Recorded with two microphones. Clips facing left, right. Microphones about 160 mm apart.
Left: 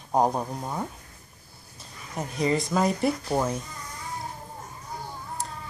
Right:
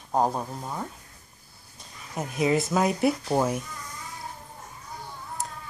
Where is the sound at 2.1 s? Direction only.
5° right (ahead or behind).